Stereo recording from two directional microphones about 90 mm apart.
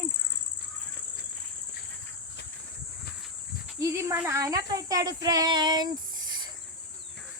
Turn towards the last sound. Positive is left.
turn(degrees=-55)  # may be behind; listen again after turning